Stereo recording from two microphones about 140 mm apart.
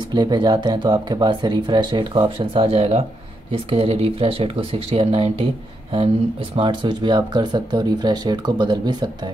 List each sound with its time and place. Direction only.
0.1 s speech: 30° right (ahead or behind)
6.5 s speech: 35° right (ahead or behind)